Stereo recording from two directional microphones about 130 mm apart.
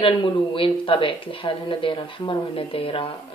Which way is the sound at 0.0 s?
40° left (ahead or behind).